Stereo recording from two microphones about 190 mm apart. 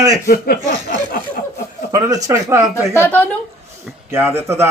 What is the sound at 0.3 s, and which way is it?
Speech, 50° left (ahead or behind).